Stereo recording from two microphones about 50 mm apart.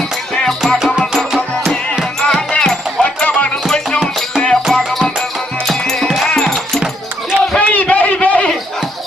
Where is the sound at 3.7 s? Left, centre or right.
Centre.